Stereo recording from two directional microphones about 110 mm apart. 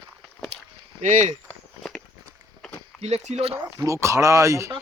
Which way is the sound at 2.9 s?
75° right (ahead or behind).